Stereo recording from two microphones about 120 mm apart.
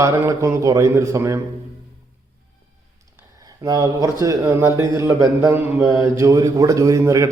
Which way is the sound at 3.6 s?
30° right (ahead or behind).